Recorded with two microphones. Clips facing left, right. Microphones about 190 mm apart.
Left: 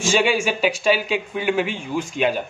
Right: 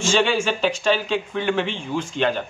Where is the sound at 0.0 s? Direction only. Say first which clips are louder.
Left 1 dB; 10° left (ahead or behind).